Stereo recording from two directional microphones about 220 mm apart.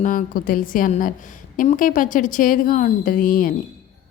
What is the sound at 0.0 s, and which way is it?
A woman's voice, 40° left (ahead or behind).